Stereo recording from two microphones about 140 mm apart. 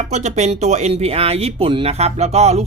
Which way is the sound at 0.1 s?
55° right (ahead or behind).